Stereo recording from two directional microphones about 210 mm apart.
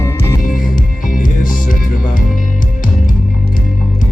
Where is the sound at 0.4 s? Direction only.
40° left (ahead or behind).